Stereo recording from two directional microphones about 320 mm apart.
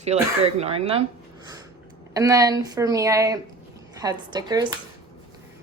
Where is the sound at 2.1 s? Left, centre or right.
Centre.